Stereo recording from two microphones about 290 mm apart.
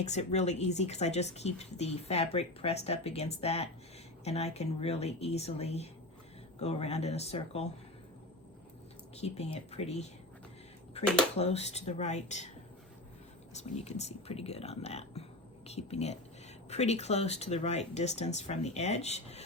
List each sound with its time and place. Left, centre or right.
0.0 s speech: left
9.1 s speech: left
13.5 s speech: left